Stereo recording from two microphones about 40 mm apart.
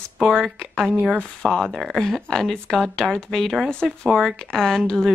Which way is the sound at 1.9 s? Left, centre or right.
Centre.